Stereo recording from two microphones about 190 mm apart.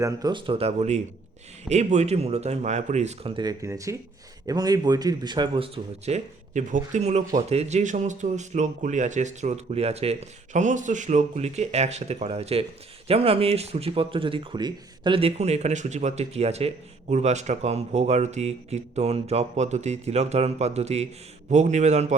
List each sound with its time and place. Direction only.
0.0 s speech: 20° right (ahead or behind); by 22.1 s 35° right (ahead or behind)